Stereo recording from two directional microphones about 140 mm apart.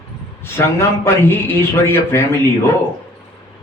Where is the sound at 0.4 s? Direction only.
15° left (ahead or behind).